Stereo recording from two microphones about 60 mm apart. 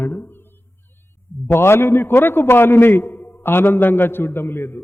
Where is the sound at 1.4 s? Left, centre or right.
Left.